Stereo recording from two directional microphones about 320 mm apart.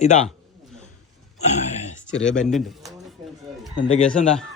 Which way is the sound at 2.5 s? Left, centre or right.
Centre.